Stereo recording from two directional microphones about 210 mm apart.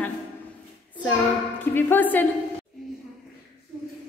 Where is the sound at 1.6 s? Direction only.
10° left (ahead or behind).